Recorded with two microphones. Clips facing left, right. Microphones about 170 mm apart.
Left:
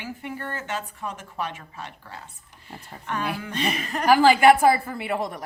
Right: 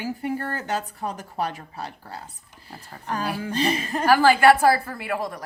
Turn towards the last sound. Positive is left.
turn(degrees=20)  # may be behind; listen again after turning